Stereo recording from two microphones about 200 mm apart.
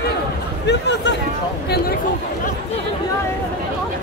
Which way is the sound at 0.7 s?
60° left (ahead or behind).